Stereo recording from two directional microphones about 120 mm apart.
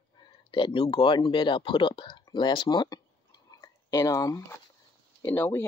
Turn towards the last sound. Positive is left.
turn(degrees=20)  # may be behind; listen again after turning